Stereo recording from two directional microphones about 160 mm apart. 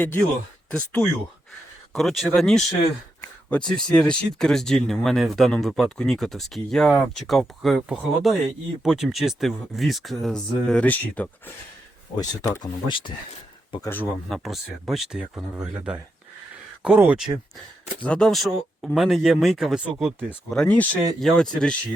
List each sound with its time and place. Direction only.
0.0 s speech: 10° left (ahead or behind)
12.1 s speech: 25° left (ahead or behind)
13.8 s speech: 10° left (ahead or behind)
14.3 s speech: centre (ahead or behind)
18.0 s speech: 5° left (ahead or behind)